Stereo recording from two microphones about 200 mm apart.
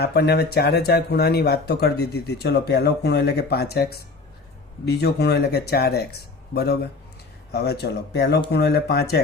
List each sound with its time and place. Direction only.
0.0 s speech: 55° left (ahead or behind)